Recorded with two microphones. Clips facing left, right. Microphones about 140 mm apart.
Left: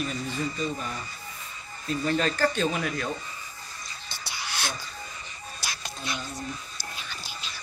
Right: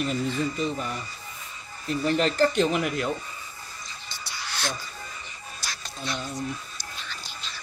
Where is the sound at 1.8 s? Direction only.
20° right (ahead or behind).